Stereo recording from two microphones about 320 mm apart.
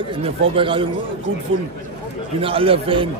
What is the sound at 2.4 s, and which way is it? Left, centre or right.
Speech, centre.